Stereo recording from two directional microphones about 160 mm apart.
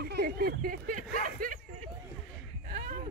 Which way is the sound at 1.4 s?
60° right (ahead or behind).